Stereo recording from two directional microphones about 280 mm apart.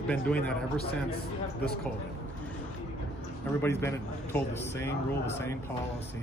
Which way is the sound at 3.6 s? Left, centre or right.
Centre.